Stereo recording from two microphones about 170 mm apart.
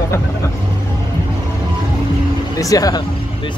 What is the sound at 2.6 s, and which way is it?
Speech, 20° left (ahead or behind).